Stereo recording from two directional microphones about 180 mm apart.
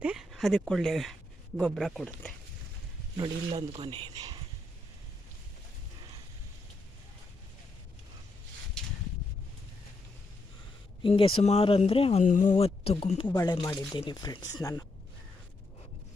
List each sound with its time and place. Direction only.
0.0 s speech: 5° right (ahead or behind)
3.2 s speech: 35° right (ahead or behind)
11.0 s speech: 30° left (ahead or behind)
12.2 s speech: 45° left (ahead or behind); by 14.8 s 20° left (ahead or behind)